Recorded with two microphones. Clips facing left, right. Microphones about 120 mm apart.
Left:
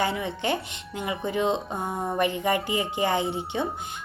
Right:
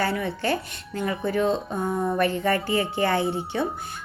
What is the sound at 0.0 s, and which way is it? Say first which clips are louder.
A woman's voice: right 1 dB; 20° left (ahead or behind).